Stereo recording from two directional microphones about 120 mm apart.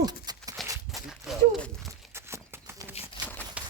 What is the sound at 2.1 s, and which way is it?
Horse, 20° right (ahead or behind).